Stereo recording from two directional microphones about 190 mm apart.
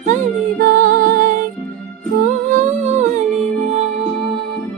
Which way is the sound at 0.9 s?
45° right (ahead or behind).